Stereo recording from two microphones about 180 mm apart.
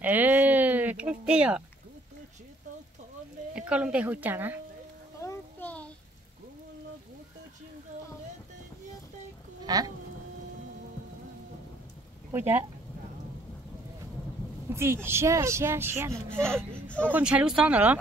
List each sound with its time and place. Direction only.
0.0 s a sound: 10° right (ahead or behind)
3.5 s a woman's voice: 5° right (ahead or behind)
5.2 s a sound: 10° left (ahead or behind)
9.7 s speech: 20° right (ahead or behind)
12.3 s a woman's voice: 15° right (ahead or behind)
14.7 s a woman's voice: 15° right (ahead or behind)
16.1 s speech: 5° left (ahead or behind)
17.1 s a woman's voice: 5° right (ahead or behind)